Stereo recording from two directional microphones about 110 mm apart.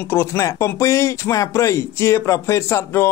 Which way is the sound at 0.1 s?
20° left (ahead or behind).